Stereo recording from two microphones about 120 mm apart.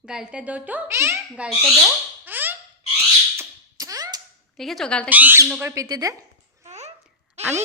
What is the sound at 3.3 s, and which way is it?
Fire alarm, 30° right (ahead or behind).